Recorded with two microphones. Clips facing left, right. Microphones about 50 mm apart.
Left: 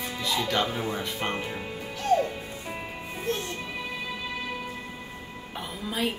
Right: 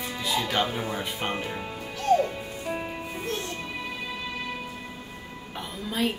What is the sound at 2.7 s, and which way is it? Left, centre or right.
Music, centre.